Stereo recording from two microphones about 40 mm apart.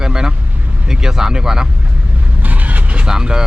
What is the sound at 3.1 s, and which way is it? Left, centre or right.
Speech, centre.